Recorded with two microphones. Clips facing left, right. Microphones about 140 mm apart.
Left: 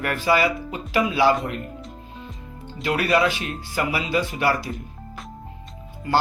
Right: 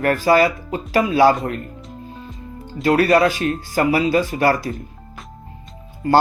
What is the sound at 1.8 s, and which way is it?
Music, centre (ahead or behind).